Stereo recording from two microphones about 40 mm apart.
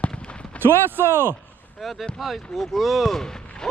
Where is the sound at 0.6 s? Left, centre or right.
Right.